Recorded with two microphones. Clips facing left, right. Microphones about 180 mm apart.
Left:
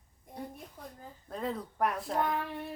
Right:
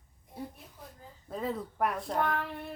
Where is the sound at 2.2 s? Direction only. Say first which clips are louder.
Right 1 dB; 15° left (ahead or behind).